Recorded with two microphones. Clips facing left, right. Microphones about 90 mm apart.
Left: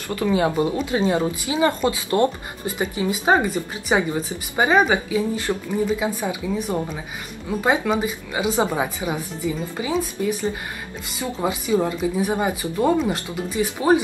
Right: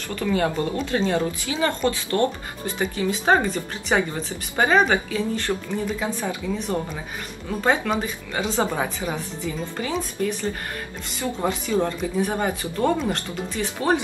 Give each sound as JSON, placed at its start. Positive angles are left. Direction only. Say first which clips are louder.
{"t": 0.1, "sound": "speech", "louder": "left 3 dB", "side_deg": 15}